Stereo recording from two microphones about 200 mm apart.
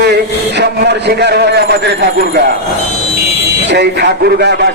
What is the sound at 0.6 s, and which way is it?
A man's voice, 55° right (ahead or behind).